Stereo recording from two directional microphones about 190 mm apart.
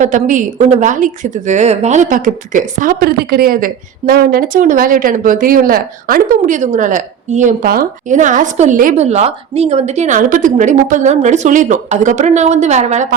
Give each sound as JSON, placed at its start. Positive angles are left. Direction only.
{"t": 0.0, "sound": "a woman's voice", "side_deg": -40}